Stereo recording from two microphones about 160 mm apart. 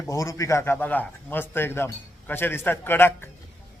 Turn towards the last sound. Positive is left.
turn(degrees=15)  # may be behind; listen again after turning